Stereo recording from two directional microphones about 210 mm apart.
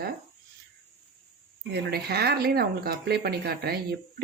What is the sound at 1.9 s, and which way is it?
Speech, 50° right (ahead or behind).